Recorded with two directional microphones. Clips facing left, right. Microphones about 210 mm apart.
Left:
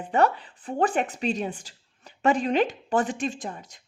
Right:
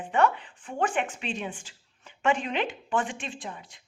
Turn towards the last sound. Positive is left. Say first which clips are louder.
# left 4 dB
turn(degrees=40)  # may be behind; listen again after turning